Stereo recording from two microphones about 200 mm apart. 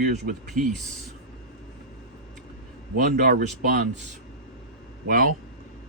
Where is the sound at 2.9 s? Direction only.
45° right (ahead or behind).